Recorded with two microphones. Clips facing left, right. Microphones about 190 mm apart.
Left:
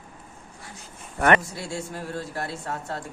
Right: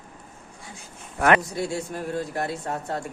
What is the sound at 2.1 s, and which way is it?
Speech, 20° right (ahead or behind).